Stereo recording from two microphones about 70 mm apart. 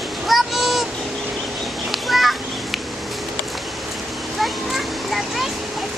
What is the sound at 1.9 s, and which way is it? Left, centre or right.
Children playing, centre.